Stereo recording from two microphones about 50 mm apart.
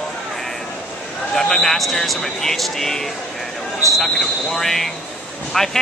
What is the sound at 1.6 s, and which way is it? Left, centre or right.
Speech, centre.